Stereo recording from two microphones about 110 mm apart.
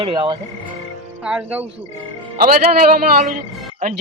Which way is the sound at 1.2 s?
10° right (ahead or behind).